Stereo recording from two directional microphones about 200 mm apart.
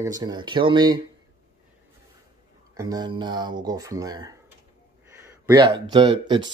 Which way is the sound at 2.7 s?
20° right (ahead or behind).